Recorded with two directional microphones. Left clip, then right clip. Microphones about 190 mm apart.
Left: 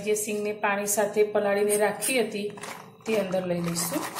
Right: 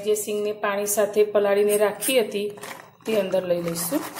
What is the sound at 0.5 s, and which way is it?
A woman's voice, 25° right (ahead or behind).